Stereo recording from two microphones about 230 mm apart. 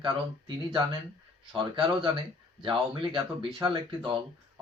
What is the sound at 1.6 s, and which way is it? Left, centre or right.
Speech, right.